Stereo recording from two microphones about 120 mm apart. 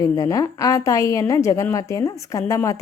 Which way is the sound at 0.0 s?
30° left (ahead or behind).